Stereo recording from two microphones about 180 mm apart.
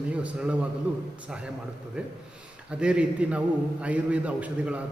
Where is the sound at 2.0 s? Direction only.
5° right (ahead or behind).